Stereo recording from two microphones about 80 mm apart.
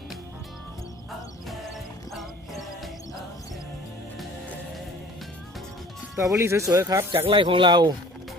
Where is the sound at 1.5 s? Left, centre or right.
Centre.